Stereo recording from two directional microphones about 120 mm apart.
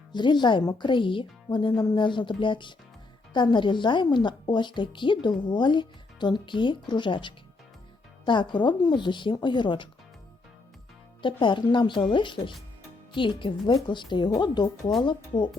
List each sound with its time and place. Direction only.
0.1 s speech: 40° left (ahead or behind)
11.2 s a woman's voice: 40° left (ahead or behind)